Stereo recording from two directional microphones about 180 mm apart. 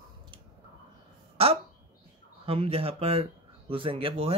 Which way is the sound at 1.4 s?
35° right (ahead or behind).